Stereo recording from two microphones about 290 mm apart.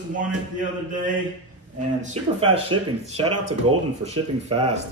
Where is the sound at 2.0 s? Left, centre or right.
Right.